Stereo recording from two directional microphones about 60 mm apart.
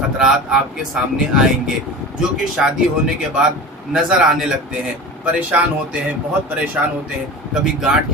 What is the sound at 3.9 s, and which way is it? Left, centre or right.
Speech, centre.